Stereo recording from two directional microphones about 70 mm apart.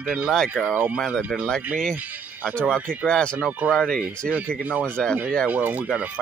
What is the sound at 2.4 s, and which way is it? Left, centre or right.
Speech, centre.